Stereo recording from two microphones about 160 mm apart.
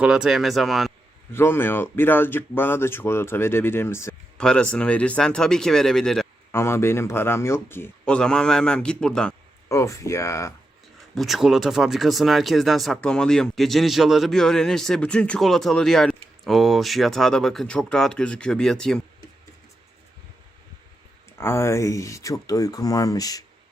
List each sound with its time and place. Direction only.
0.0 s speech: 5° right (ahead or behind)
1.3 s speech: 15° left (ahead or behind)
6.5 s speech: 15° left (ahead or behind)
9.6 s speech: 20° left (ahead or behind)
11.1 s speech: centre (ahead or behind)
21.3 s speech: 15° left (ahead or behind)